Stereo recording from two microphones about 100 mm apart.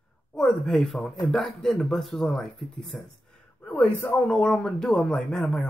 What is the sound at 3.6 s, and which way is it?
Speech, 15° left (ahead or behind).